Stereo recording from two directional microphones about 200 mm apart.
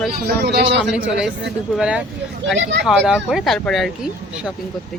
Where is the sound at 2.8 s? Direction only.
Centre (ahead or behind).